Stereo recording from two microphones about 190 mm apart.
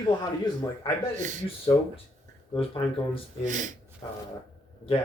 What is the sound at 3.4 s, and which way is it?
Speech, 40° right (ahead or behind).